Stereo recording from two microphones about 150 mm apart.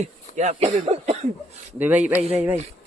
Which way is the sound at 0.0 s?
50° right (ahead or behind).